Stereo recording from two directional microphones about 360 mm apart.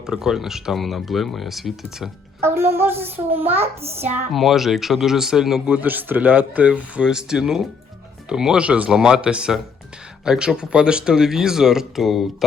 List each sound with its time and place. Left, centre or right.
0.0 s speech: centre
3.6 s child singing: centre
4.1 s speech: centre